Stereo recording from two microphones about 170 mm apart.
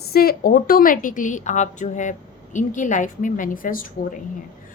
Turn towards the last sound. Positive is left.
turn(degrees=55)  # may be behind; listen again after turning